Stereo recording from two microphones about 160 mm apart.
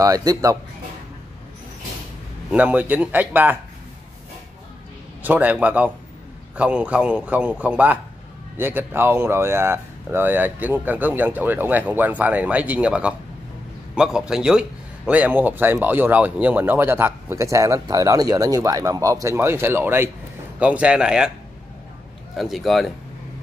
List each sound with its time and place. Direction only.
0.0 s speech: 25° right (ahead or behind)
2.5 s a man's voice: 10° right (ahead or behind)
5.2 s a man's voice: 10° right (ahead or behind)
22.4 s speech: centre (ahead or behind)